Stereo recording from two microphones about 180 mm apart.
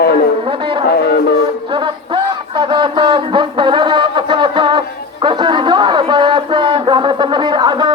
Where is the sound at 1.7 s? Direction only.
25° right (ahead or behind).